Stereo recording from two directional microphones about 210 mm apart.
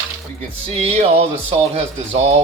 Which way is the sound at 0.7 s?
30° right (ahead or behind).